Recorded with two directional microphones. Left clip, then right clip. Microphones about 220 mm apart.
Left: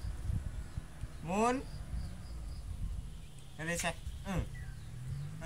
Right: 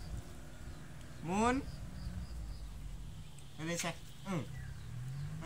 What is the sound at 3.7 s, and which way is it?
Speech, 45° left (ahead or behind).